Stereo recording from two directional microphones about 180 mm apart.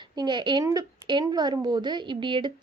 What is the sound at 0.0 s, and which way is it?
Speech, 25° right (ahead or behind).